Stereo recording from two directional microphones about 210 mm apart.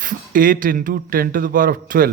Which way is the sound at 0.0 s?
40° right (ahead or behind).